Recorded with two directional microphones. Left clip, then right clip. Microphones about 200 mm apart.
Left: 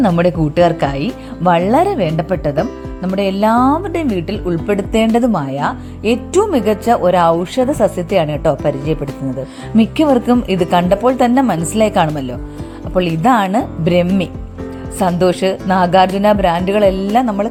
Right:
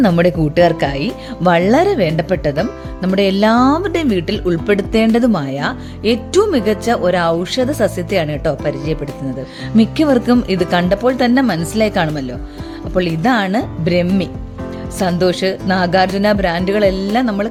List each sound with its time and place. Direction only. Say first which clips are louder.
0.2 s speech: even; 15° right (ahead or behind)